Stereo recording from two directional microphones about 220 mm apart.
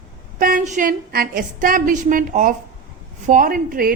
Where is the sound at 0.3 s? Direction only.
40° right (ahead or behind).